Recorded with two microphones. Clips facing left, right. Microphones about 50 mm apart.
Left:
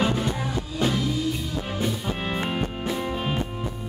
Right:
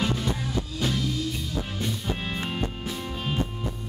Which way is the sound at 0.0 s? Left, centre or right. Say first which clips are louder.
Left 3 dB; centre.